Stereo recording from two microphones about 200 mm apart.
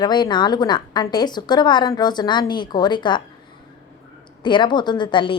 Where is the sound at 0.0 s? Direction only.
20° left (ahead or behind).